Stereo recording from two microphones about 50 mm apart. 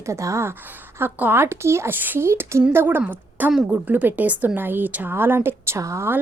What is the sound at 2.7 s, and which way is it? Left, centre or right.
A woman's voice, right.